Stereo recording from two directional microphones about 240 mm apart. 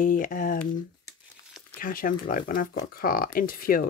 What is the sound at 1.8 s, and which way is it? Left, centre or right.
Speech, left.